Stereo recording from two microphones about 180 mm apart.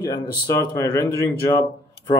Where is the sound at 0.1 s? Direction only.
15° left (ahead or behind).